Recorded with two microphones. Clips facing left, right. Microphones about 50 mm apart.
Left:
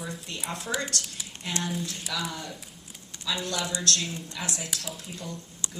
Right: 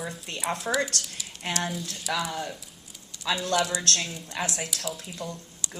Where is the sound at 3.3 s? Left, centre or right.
Right.